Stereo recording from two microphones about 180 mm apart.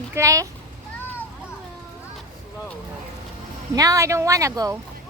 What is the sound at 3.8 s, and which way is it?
Speech, 20° right (ahead or behind).